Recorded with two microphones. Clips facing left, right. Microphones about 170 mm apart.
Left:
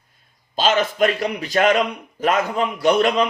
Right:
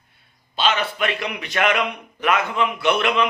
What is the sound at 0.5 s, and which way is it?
A man's voice, 40° left (ahead or behind).